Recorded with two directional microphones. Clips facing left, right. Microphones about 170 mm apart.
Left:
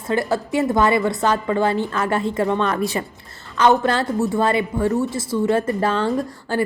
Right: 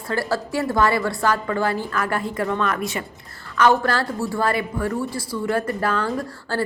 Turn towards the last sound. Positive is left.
turn(degrees=25)  # may be behind; listen again after turning